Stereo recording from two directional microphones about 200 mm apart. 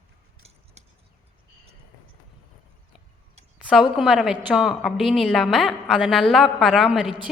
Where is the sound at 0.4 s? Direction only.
35° right (ahead or behind).